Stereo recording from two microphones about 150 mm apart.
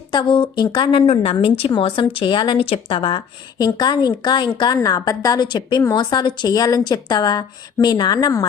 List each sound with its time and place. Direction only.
0.1 s a woman's voice: 30° left (ahead or behind)